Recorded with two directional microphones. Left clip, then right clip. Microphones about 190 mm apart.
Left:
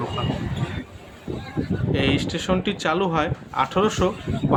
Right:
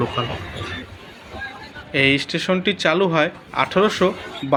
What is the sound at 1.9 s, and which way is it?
Speech, 5° right (ahead or behind).